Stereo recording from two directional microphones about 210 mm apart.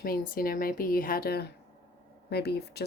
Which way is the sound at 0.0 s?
45° left (ahead or behind).